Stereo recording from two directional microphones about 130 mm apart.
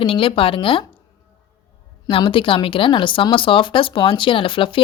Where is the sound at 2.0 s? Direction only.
40° left (ahead or behind).